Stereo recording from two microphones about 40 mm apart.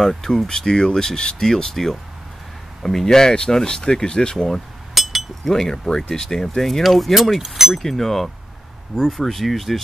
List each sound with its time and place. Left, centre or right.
0.0 s speech: centre
5.0 s chink: centre
5.4 s speech: centre
7.8 s speech: centre